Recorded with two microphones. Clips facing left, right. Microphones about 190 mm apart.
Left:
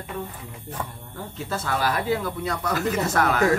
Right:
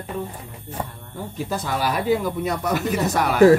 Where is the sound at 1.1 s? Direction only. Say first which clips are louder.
Right 4 dB; 15° right (ahead or behind).